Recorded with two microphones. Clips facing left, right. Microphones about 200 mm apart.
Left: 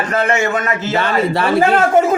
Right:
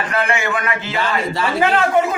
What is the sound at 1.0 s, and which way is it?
Speech, 60° left (ahead or behind).